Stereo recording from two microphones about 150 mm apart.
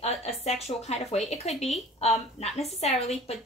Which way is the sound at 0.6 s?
45° left (ahead or behind).